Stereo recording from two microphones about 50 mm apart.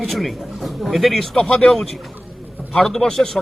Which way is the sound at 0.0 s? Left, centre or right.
Centre.